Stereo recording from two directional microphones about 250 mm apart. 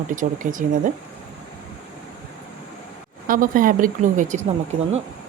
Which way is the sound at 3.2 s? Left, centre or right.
Right.